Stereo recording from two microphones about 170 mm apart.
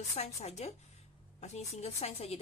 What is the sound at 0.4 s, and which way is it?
A woman's voice, 40° left (ahead or behind).